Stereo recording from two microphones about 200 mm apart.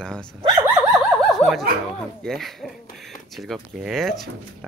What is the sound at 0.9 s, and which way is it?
Snicker, centre (ahead or behind).